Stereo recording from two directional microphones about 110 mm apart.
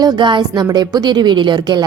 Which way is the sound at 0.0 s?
40° right (ahead or behind).